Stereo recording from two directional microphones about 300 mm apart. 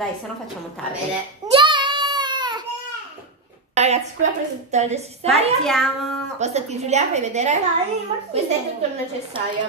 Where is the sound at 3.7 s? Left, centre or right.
Right.